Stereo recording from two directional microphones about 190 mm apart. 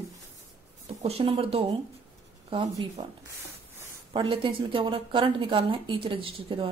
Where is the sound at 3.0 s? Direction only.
30° right (ahead or behind).